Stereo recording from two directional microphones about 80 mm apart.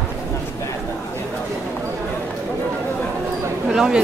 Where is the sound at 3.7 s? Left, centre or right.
Centre.